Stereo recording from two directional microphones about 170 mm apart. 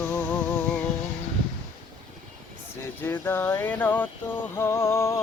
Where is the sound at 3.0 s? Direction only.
15° left (ahead or behind).